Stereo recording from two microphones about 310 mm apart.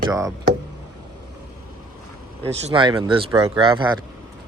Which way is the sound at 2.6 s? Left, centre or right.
Centre.